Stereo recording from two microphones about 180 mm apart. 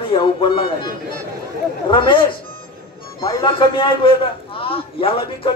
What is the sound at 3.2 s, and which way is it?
A man's voice, 25° left (ahead or behind).